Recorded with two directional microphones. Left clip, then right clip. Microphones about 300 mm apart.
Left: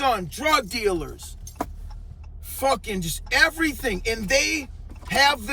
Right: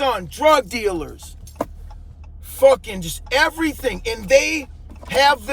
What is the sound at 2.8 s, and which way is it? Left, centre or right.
Speech, centre.